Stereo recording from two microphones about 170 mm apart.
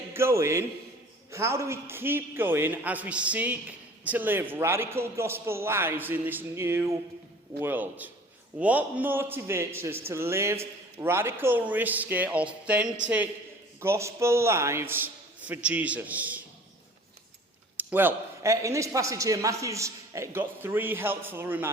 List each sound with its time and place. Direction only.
0.1 s a man's voice: 15° right (ahead or behind)
17.7 s a man's voice: 10° right (ahead or behind)